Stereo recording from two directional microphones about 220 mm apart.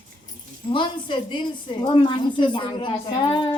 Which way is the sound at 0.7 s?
20° left (ahead or behind).